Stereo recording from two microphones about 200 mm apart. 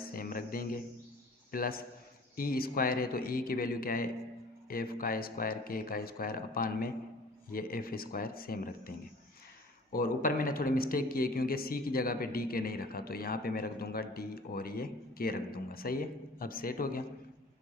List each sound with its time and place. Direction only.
0.1 s a sound: 45° left (ahead or behind)
1.5 s a man's voice: 45° left (ahead or behind)
9.9 s a man's voice: 45° left (ahead or behind)